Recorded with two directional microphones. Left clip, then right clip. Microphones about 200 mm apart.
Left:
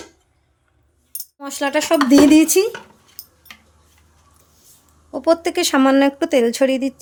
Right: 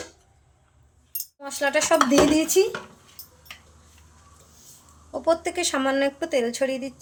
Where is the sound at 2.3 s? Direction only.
60° left (ahead or behind).